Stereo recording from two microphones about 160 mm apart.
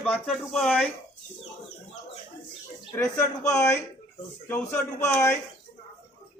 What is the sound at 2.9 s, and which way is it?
Speech, 15° left (ahead or behind).